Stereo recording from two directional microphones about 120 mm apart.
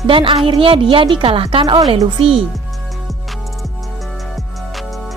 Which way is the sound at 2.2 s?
50° right (ahead or behind).